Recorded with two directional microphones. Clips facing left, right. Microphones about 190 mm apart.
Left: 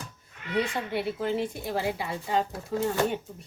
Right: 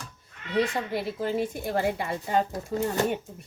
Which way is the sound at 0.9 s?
40° right (ahead or behind).